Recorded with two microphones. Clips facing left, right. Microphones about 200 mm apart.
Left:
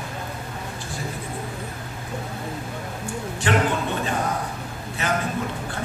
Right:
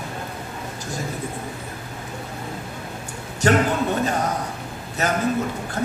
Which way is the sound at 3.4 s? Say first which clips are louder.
Right 4 dB; 40° right (ahead or behind).